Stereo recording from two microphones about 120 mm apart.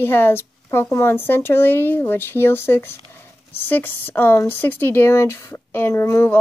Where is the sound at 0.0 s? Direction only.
20° left (ahead or behind).